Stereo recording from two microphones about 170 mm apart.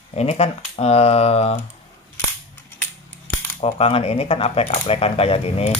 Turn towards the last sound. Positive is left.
turn(degrees=35)  # may be behind; listen again after turning